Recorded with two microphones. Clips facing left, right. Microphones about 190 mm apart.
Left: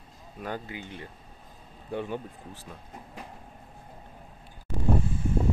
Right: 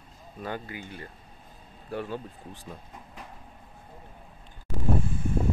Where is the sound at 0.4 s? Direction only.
10° left (ahead or behind).